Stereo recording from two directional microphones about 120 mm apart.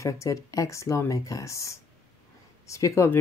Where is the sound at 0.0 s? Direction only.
25° left (ahead or behind).